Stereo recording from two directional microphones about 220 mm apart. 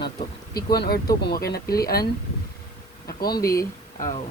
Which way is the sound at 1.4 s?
45° left (ahead or behind).